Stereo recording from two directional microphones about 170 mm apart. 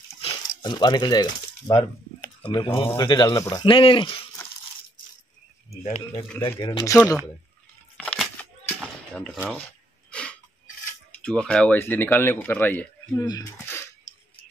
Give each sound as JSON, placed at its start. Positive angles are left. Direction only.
{"t": 0.3, "sound": "speech", "side_deg": 25}
{"t": 3.6, "sound": "speech", "side_deg": 30}
{"t": 5.7, "sound": "speech", "side_deg": 40}
{"t": 6.6, "sound": "speech", "side_deg": 25}
{"t": 8.0, "sound": "a sound", "side_deg": 10}
{"t": 9.1, "sound": "speech", "side_deg": 5}
{"t": 11.2, "sound": "speech", "side_deg": 5}
{"t": 13.2, "sound": "speech", "side_deg": 20}